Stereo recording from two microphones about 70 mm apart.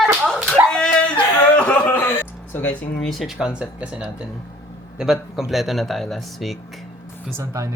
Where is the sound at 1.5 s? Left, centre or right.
Centre.